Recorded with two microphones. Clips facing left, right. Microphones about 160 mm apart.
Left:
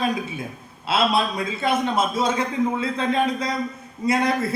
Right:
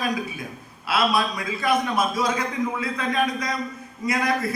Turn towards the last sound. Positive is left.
turn(degrees=30)  # may be behind; listen again after turning